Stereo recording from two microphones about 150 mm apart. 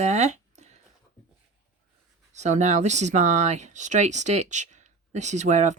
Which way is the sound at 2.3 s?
50° right (ahead or behind).